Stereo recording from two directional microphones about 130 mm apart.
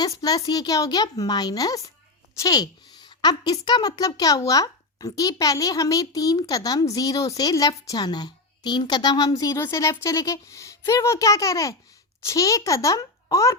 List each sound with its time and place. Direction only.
0.0 s a woman's voice: 30° left (ahead or behind)